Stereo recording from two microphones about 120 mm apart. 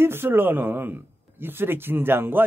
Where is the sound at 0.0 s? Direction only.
20° right (ahead or behind).